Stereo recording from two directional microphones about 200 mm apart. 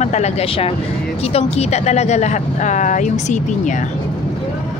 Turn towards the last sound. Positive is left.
turn(degrees=40)  # may be behind; listen again after turning